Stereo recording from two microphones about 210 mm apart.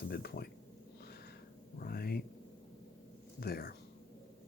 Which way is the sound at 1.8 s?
45° left (ahead or behind).